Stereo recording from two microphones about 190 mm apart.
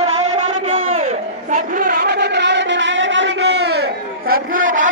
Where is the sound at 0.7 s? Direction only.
35° right (ahead or behind).